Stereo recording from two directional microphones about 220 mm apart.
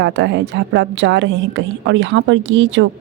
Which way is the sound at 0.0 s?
55° right (ahead or behind).